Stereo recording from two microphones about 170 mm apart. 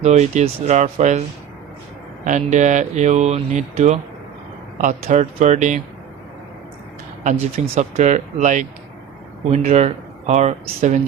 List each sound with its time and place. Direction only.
0.0 s speech: 40° right (ahead or behind)
2.2 s speech: 45° right (ahead or behind)
7.5 s speech: 40° right (ahead or behind)